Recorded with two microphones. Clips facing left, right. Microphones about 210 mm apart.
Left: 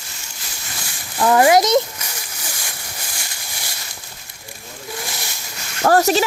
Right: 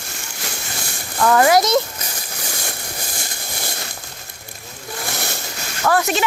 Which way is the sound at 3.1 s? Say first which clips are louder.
Right 5 dB; 55° right (ahead or behind).